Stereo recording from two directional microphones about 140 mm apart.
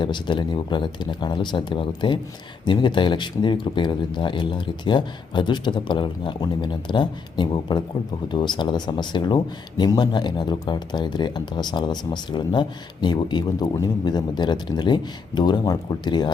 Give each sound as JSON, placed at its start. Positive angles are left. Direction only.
{"t": 0.0, "sound": "speech", "side_deg": 35}